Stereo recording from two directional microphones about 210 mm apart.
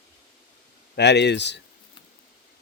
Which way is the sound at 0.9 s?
55° left (ahead or behind).